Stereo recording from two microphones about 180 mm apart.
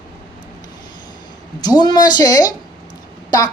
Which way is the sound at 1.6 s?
20° left (ahead or behind).